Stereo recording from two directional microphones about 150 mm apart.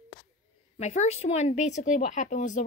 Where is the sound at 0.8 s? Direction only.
50° left (ahead or behind).